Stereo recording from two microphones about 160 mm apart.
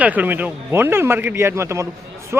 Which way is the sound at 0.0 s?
10° right (ahead or behind).